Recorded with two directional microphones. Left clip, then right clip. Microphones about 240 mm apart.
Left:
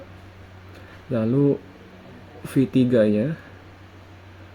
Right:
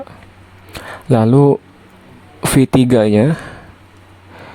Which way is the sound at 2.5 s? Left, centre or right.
Right.